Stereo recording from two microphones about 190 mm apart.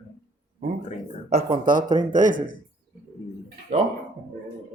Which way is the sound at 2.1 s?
40° right (ahead or behind).